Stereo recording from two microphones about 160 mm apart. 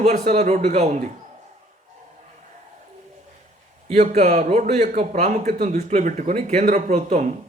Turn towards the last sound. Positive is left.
turn(degrees=-50)  # may be behind; listen again after turning